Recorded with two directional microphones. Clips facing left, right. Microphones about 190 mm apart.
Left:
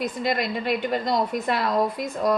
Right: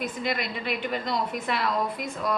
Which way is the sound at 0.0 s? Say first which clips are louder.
Left 4 dB; 45° left (ahead or behind).